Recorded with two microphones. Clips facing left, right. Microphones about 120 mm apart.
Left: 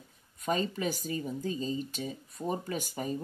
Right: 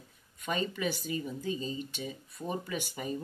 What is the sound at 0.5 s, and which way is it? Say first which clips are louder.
Speech: left 2 dB; 40° left (ahead or behind).